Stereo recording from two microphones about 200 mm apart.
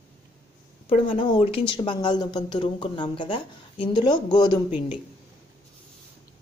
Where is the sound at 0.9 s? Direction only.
25° left (ahead or behind).